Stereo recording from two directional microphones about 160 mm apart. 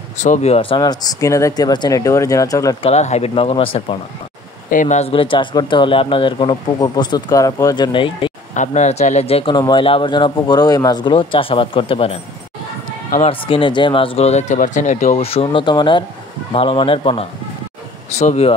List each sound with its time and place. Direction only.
0.2 s speech: 45° left (ahead or behind); by 2.8 s 20° left (ahead or behind)
2.8 s speech: 45° left (ahead or behind)
4.6 s speech: 55° left (ahead or behind); by 8.3 s 30° left (ahead or behind)
8.5 s speech: 45° left (ahead or behind)
13.3 s speech: 35° left (ahead or behind)